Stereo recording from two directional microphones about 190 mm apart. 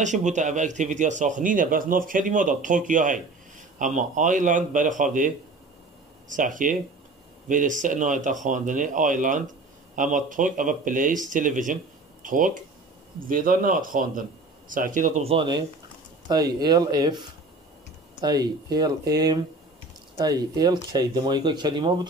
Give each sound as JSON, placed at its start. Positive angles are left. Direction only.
{"t": 0.0, "sound": "speech", "side_deg": -40}